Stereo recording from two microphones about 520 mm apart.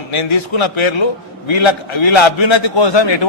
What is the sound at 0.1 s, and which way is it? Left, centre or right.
A man's voice, left.